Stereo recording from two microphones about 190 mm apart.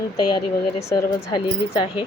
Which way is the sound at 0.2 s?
20° left (ahead or behind).